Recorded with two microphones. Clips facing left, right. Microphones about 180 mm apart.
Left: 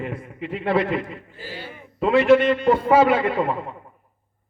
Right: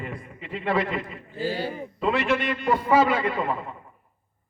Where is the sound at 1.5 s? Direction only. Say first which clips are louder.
Right 8 dB; 35° right (ahead or behind).